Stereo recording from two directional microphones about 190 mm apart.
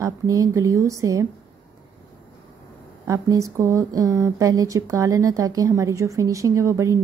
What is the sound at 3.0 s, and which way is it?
A woman's voice, 20° right (ahead or behind).